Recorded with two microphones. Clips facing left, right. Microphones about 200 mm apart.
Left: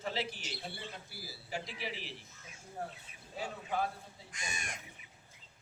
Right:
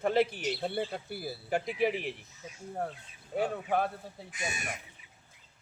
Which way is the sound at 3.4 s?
60° right (ahead or behind).